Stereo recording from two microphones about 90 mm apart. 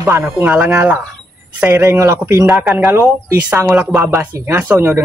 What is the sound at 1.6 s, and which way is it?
Speech, 25° right (ahead or behind).